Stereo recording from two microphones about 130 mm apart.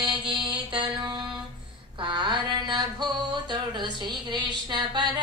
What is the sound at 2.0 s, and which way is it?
Mantra, 35° right (ahead or behind).